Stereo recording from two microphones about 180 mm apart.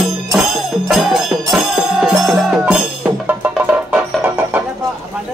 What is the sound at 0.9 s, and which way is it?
Music, centre (ahead or behind).